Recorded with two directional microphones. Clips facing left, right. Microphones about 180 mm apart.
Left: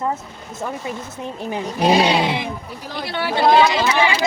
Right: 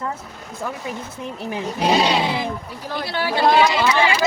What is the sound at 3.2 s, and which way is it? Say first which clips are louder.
Speech: left 2 dB; 20° left (ahead or behind).